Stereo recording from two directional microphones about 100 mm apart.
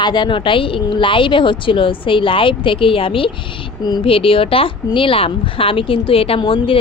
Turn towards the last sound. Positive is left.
turn(degrees=65)  # may be behind; listen again after turning